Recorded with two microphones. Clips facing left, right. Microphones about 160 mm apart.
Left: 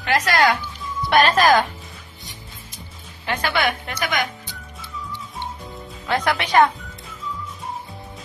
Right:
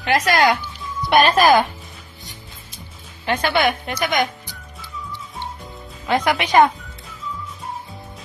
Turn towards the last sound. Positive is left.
turn(degrees=-15)  # may be behind; listen again after turning